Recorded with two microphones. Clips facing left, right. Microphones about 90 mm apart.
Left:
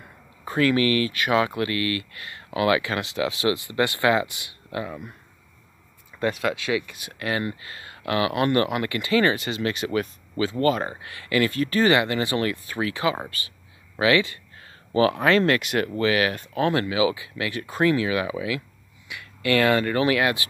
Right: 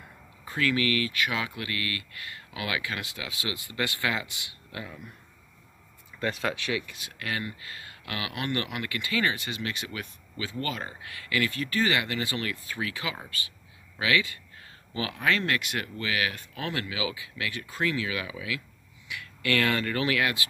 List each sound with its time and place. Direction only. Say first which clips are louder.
0.5 s speech: left 6 dB; 40° left (ahead or behind); by 3.7 s 55° left (ahead or behind)
3.7 s speech: left 7 dB; 30° left (ahead or behind)
6.1 s a sound: left 6 dB; 45° left (ahead or behind)
7.1 s speech: left 8 dB; 30° left (ahead or behind)
9.3 s speech: left 7 dB; 70° left (ahead or behind)
9.8 s speech: left 13 dB; 50° left (ahead or behind)
11.1 s speech: left 5 dB; 35° left (ahead or behind)
11.6 s speech: left 7 dB; 50° left (ahead or behind)
11.9 s speech: left 8 dB; 25° left (ahead or behind)
13.0 s speech: left 10 dB; 40° left (ahead or behind)
17.5 s speech: left 8 dB; 55° left (ahead or behind)
17.8 s speech: left 8 dB; 35° left (ahead or behind)
19.0 s speech: left 5 dB; 20° left (ahead or behind)